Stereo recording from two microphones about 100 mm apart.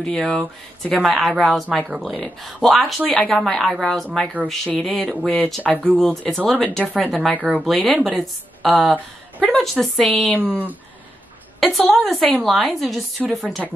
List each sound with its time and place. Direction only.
0.0 s speech: 5° left (ahead or behind)
5.6 s speech: 15° left (ahead or behind)
5.9 s speech: 5° left (ahead or behind)
7.3 s speech: 15° right (ahead or behind)
7.6 s speech: centre (ahead or behind)
10.2 s speech: 15° left (ahead or behind)
11.6 s speech: centre (ahead or behind)